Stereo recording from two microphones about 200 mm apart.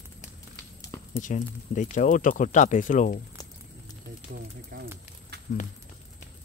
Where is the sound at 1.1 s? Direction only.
40° left (ahead or behind).